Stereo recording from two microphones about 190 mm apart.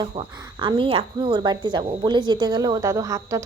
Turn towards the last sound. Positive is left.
turn(degrees=-15)  # may be behind; listen again after turning